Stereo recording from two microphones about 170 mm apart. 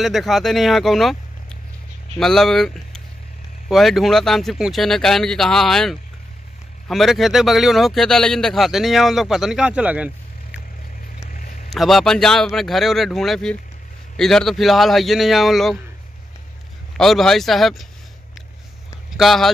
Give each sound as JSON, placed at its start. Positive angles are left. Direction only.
{"t": 0.0, "sound": "speech", "side_deg": 0}
{"t": 2.1, "sound": "speech", "side_deg": 0}
{"t": 11.3, "sound": "a sound", "side_deg": 50}
{"t": 11.7, "sound": "speech", "side_deg": 0}
{"t": 16.9, "sound": "speech", "side_deg": 0}
{"t": 19.1, "sound": "speech", "side_deg": 0}